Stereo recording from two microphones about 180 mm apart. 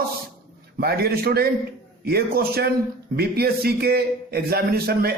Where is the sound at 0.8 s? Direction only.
60° right (ahead or behind).